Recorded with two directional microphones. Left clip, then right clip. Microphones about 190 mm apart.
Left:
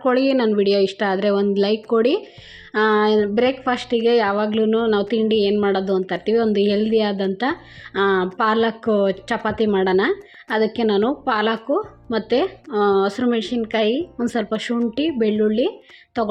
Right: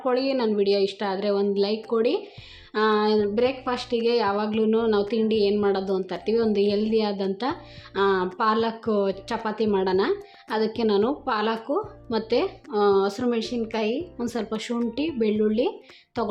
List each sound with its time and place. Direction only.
0.0 s a woman's voice: 30° left (ahead or behind)